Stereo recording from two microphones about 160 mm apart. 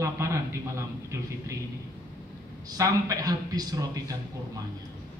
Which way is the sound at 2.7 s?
20° right (ahead or behind).